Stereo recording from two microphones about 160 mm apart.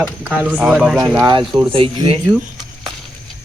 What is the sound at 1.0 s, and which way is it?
Speech, 20° right (ahead or behind).